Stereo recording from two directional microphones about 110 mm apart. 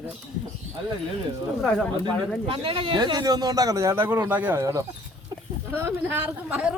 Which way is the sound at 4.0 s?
20° right (ahead or behind).